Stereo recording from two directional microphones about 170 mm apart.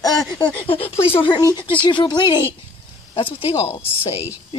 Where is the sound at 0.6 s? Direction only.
35° left (ahead or behind).